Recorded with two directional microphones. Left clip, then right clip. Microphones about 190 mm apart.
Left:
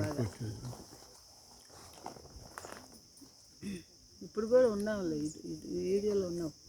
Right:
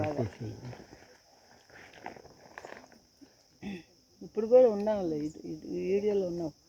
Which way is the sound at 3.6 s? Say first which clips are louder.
Right 2 dB; 20° left (ahead or behind).